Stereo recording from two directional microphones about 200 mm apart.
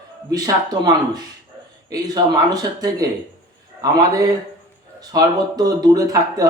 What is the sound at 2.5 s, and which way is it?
A man's voice, 20° right (ahead or behind).